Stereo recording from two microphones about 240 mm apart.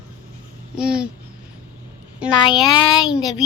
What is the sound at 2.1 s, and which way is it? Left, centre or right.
Speech, centre.